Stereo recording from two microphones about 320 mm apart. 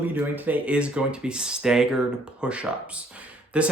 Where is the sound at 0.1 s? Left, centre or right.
Centre.